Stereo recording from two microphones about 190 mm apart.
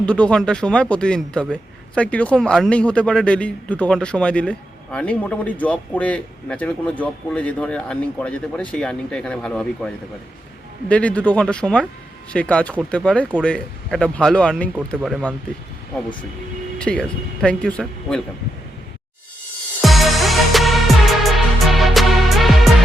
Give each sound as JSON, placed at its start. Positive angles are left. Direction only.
{"t": 0.0, "sound": "speech", "side_deg": 5}
{"t": 16.7, "sound": "speech", "side_deg": 5}
{"t": 19.8, "sound": "music", "side_deg": 0}